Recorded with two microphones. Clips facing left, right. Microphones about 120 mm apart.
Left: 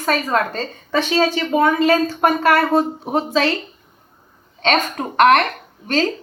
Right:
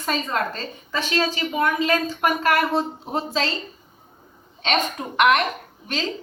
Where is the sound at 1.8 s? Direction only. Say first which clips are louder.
Left 6 dB; 55° left (ahead or behind).